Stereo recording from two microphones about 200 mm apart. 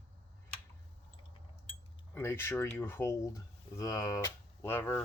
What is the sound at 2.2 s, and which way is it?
Speech, 10° left (ahead or behind).